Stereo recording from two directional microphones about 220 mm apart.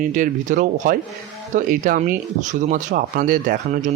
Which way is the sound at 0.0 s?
35° right (ahead or behind).